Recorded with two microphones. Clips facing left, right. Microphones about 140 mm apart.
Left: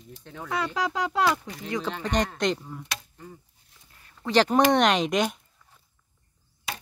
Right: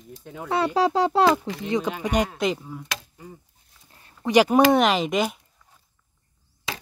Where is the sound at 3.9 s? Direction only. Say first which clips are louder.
Right 4 dB; 30° right (ahead or behind).